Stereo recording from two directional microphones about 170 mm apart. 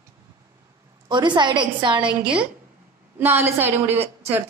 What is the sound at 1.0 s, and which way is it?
A woman's voice, 25° right (ahead or behind).